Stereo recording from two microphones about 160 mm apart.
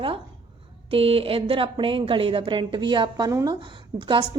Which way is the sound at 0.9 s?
35° right (ahead or behind).